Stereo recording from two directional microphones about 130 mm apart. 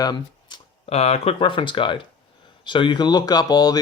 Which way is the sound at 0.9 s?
55° left (ahead or behind).